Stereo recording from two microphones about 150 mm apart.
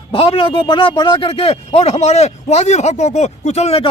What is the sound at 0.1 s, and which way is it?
A man's voice, 35° left (ahead or behind).